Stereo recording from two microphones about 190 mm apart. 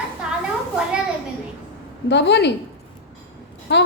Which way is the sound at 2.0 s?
65° left (ahead or behind).